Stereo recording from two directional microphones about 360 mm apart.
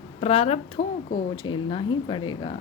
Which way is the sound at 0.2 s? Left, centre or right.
Centre.